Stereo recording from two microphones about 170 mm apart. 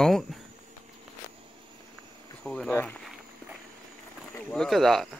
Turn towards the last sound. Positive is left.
turn(degrees=0)  # may be behind; listen again after turning